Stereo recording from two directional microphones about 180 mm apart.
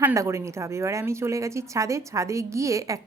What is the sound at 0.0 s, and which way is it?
Speech, 15° right (ahead or behind).